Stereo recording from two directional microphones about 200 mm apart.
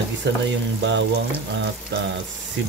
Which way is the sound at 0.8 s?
65° right (ahead or behind).